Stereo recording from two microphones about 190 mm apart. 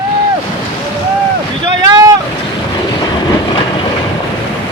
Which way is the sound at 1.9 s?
20° right (ahead or behind).